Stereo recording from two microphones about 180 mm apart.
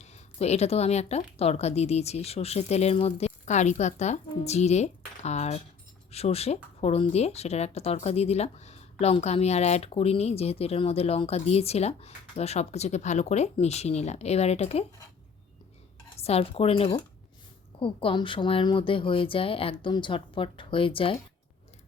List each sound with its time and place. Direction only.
0.0 s speech: 35° left (ahead or behind)
16.1 s speech: 35° left (ahead or behind)